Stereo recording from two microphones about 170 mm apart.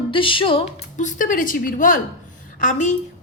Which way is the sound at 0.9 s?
50° left (ahead or behind).